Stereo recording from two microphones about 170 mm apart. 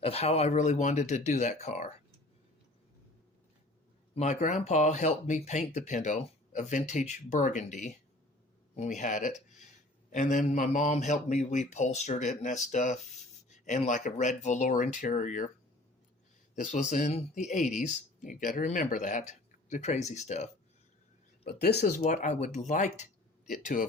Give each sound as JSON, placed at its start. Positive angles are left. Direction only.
{"t": 0.0, "sound": "speech", "side_deg": 35}
{"t": 4.1, "sound": "speech", "side_deg": 40}
{"t": 16.6, "sound": "speech", "side_deg": 45}
{"t": 21.4, "sound": "speech", "side_deg": 70}
{"t": 22.0, "sound": "speech", "side_deg": 45}